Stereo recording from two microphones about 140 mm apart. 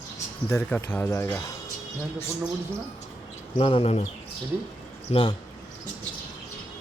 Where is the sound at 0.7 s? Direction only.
15° left (ahead or behind).